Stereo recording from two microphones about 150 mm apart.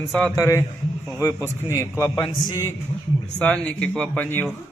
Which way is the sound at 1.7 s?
20° left (ahead or behind).